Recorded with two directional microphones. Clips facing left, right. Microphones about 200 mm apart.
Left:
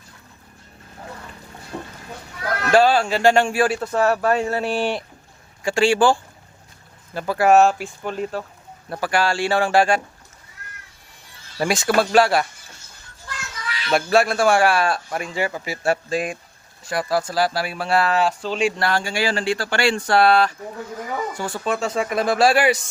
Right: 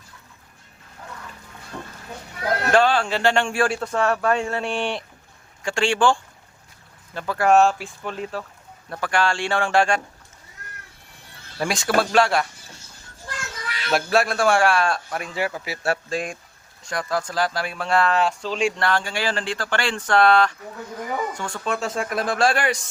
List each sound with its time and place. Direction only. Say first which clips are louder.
1.7 s chicken: left 3 dB; 20° left (ahead or behind)
2.4 s a sound: right 2 dB; 25° right (ahead or behind)
2.7 s a man's voice: left 4 dB; 10° left (ahead or behind)
11.5 s a man's voice: left 3 dB; centre (ahead or behind)
13.9 s a man's voice: left 3 dB; centre (ahead or behind)